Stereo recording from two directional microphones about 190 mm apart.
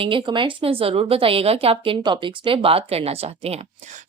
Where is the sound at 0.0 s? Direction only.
25° right (ahead or behind).